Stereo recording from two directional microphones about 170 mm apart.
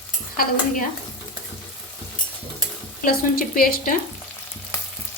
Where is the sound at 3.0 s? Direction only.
60° left (ahead or behind).